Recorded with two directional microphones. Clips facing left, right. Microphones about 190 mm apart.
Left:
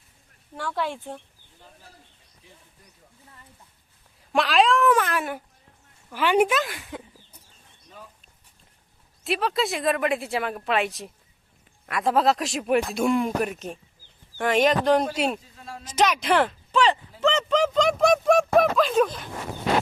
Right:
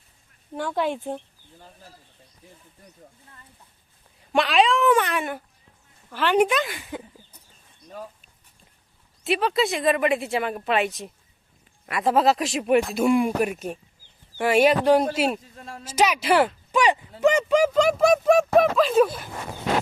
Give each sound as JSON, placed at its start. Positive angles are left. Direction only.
{"t": 0.5, "sound": "speech", "side_deg": -20}
{"t": 4.3, "sound": "speech", "side_deg": 0}
{"t": 9.2, "sound": "speech", "side_deg": 0}